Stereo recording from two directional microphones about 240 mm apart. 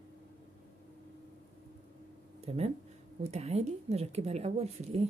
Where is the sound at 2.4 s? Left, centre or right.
Right.